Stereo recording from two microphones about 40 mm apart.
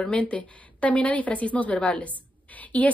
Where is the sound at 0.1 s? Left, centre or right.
Left.